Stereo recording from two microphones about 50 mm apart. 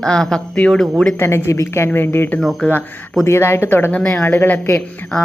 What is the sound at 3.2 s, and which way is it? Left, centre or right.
Speech, left.